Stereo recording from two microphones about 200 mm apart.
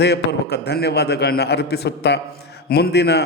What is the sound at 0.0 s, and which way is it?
A man's voice, 55° left (ahead or behind).